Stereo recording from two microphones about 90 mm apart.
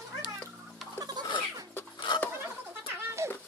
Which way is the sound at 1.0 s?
50° right (ahead or behind).